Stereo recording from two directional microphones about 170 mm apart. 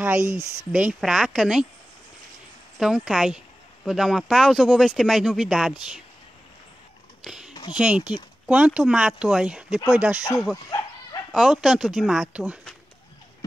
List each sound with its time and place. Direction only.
0.0 s a sound: 15° right (ahead or behind)
0.7 s speech: 5° right (ahead or behind)
2.8 s speech: centre (ahead or behind)
7.2 s a sound: 5° right (ahead or behind)
7.7 s speech: 5° right (ahead or behind)
10.7 s dog: 20° left (ahead or behind)
11.3 s speech: centre (ahead or behind)